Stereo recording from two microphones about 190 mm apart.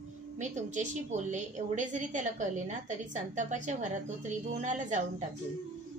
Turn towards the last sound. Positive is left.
turn(degrees=-40)  # may be behind; listen again after turning